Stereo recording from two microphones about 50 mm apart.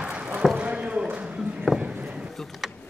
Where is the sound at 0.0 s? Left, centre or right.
Right.